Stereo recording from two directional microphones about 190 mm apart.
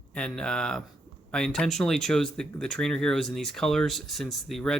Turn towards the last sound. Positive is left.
turn(degrees=0)  # may be behind; listen again after turning